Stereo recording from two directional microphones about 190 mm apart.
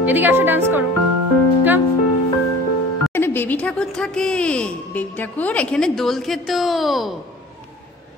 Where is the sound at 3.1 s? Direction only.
10° left (ahead or behind).